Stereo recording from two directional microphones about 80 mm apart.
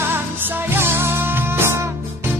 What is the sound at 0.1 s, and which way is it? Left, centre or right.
Music, right.